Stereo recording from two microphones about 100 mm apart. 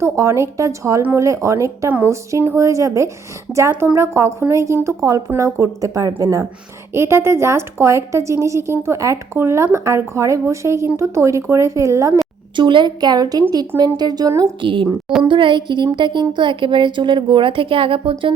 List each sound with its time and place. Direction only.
0.0 s a woman's voice: 30° right (ahead or behind)
12.5 s a woman's voice: 55° right (ahead or behind); by 14.5 s 35° right (ahead or behind)
14.6 s a woman's voice: 55° right (ahead or behind)